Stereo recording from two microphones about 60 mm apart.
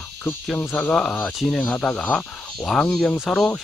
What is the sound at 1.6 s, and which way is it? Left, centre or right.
Speech, left.